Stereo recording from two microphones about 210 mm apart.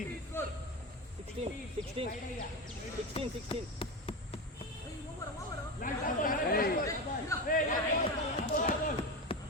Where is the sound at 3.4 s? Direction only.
25° left (ahead or behind).